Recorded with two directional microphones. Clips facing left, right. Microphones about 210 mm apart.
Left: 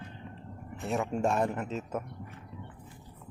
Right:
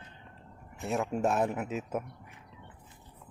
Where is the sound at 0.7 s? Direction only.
Centre (ahead or behind).